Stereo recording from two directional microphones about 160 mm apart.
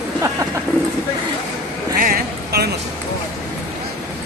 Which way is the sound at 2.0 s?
70° right (ahead or behind).